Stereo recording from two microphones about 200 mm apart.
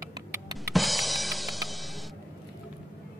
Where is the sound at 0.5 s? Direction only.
Centre (ahead or behind).